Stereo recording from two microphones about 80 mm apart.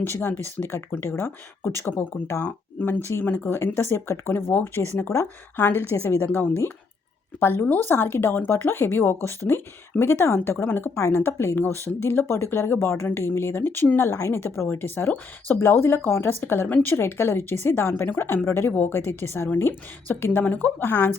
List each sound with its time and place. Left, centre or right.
0.0 s a woman's voice: left
5.5 s a woman's voice: left